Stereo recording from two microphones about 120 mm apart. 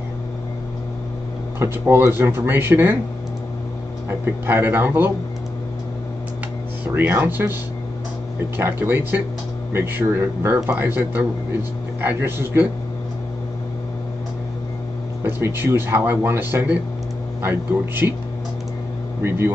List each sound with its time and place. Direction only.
1.6 s speech: 20° right (ahead or behind)
4.5 s speech: 15° right (ahead or behind)
7.0 s speech: 20° right (ahead or behind)
8.5 s speech: 15° right (ahead or behind)
15.2 s speech: 20° right (ahead or behind)
19.2 s speech: 20° right (ahead or behind)